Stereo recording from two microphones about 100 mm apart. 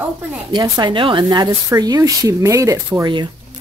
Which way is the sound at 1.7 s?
40° right (ahead or behind).